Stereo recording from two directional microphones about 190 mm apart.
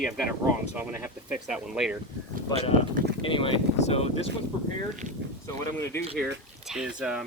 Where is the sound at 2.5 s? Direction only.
25° left (ahead or behind).